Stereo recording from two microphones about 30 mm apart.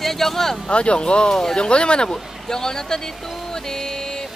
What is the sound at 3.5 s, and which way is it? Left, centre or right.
Music, centre.